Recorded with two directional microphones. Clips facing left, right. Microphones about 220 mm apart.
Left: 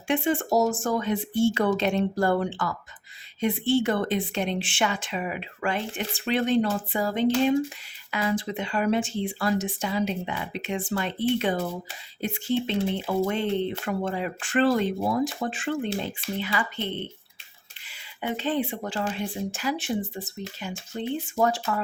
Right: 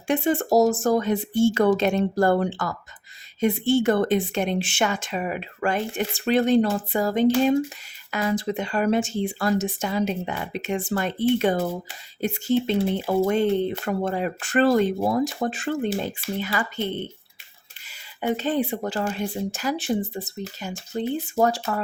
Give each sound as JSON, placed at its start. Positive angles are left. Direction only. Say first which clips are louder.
{"t": 0.1, "sound": "speech", "louder": "right 3 dB", "side_deg": -40}